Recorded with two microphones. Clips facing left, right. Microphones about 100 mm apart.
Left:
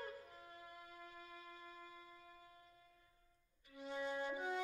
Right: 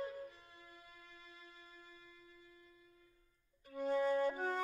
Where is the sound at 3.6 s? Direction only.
45° right (ahead or behind).